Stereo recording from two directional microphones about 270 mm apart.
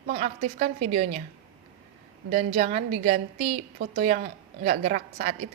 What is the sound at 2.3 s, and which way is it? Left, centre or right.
A woman's voice, right.